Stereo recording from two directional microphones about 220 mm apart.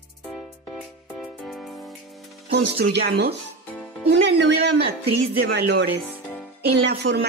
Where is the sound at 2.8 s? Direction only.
50° right (ahead or behind).